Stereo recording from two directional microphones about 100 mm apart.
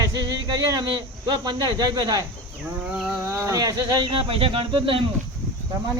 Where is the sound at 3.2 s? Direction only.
30° right (ahead or behind).